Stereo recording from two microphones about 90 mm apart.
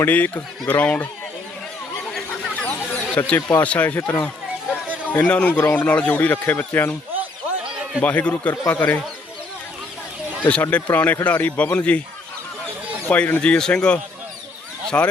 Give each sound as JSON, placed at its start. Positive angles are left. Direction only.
{"t": 0.0, "sound": "a man's voice", "side_deg": 20}
{"t": 2.6, "sound": "a sound", "side_deg": 20}
{"t": 3.6, "sound": "a man's voice", "side_deg": 15}
{"t": 8.0, "sound": "a man's voice", "side_deg": 15}
{"t": 10.5, "sound": "a man's voice", "side_deg": 15}
{"t": 13.1, "sound": "a man's voice", "side_deg": 20}